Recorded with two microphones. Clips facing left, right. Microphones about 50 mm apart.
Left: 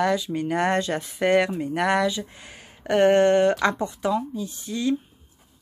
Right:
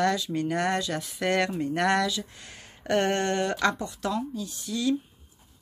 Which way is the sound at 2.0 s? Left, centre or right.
Left.